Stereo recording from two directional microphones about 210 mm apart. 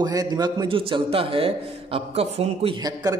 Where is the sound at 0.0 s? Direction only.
20° right (ahead or behind).